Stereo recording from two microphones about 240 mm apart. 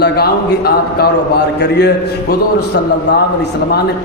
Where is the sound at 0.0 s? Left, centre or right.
Left.